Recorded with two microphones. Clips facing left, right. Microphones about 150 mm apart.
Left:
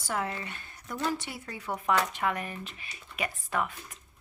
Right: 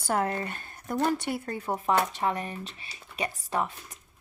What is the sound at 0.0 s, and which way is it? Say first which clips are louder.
Speech: right 5 dB; 45° right (ahead or behind).